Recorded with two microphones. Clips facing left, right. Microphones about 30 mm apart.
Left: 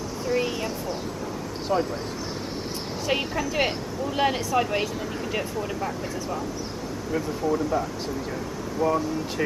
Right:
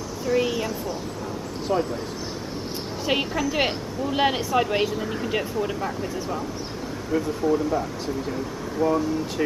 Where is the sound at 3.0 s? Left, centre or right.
Centre.